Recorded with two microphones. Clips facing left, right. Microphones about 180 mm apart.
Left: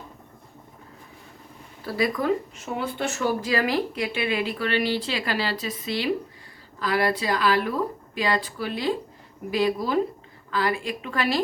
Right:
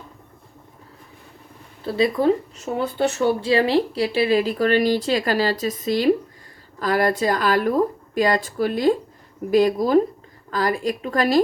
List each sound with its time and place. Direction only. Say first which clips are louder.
1.8 s speech: right 6 dB; 25° right (ahead or behind); by 11.4 s 45° right (ahead or behind)